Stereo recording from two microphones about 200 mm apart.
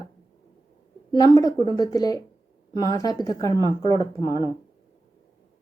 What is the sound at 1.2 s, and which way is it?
Speech, 20° left (ahead or behind).